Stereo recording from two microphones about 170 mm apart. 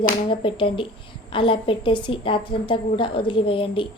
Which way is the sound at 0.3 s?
30° left (ahead or behind).